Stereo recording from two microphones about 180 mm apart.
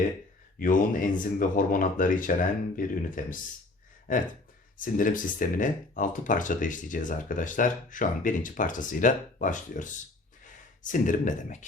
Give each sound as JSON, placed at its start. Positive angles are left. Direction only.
{"t": 0.6, "sound": "speech", "side_deg": 50}
{"t": 4.8, "sound": "speech", "side_deg": 50}